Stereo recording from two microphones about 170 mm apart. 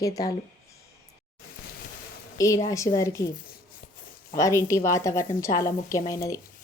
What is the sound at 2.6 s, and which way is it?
Speech, 20° left (ahead or behind).